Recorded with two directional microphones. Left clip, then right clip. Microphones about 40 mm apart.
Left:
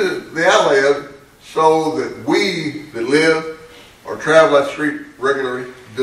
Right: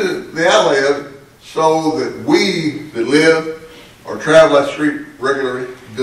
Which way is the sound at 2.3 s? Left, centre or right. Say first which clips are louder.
Right 3 dB; left.